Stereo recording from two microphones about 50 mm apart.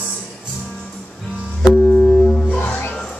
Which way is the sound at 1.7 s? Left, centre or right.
Centre.